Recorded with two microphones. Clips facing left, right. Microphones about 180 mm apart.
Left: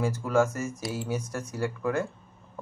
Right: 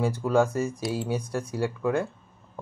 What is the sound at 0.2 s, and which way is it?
Speech, 30° right (ahead or behind).